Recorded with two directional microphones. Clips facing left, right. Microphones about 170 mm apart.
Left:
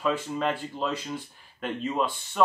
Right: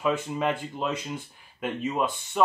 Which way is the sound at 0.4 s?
15° right (ahead or behind).